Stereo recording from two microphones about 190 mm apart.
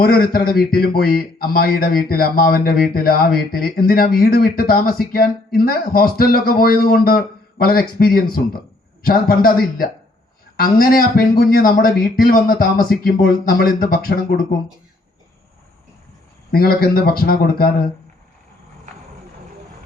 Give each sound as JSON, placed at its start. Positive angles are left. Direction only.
{"t": 0.0, "sound": "speech", "side_deg": 50}
{"t": 16.5, "sound": "speech", "side_deg": 50}